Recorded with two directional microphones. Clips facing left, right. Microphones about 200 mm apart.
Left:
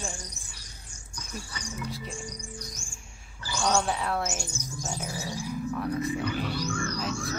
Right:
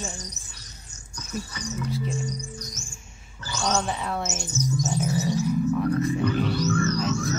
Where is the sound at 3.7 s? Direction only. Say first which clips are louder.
Even; centre (ahead or behind).